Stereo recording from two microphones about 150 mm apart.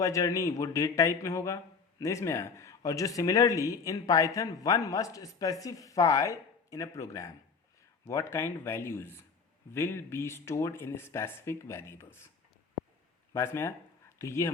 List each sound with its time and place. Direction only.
0.0 s speech: 20° left (ahead or behind)
13.3 s speech: 15° left (ahead or behind)